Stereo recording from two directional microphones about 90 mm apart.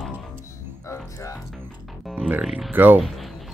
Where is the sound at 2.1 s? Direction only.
15° right (ahead or behind).